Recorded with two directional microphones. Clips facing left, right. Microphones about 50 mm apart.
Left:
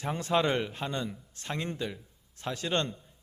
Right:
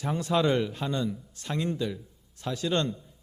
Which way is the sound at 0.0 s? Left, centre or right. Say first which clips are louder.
Right 2 dB; left.